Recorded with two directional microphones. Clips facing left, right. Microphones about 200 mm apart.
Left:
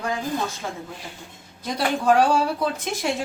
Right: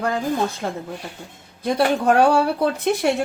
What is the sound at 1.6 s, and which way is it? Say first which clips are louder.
Speech: right 4 dB; 60° right (ahead or behind).